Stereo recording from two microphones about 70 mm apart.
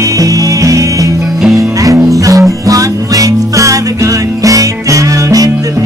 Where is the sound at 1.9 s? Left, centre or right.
Right.